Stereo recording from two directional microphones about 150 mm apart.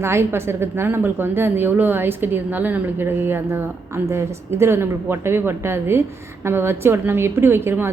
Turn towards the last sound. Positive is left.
turn(degrees=-15)  # may be behind; listen again after turning